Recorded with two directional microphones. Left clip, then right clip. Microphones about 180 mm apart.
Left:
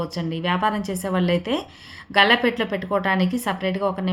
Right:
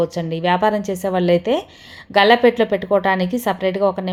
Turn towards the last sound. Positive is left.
turn(degrees=-35)  # may be behind; listen again after turning